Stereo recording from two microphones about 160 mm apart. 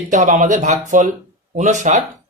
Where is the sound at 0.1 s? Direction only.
50° right (ahead or behind).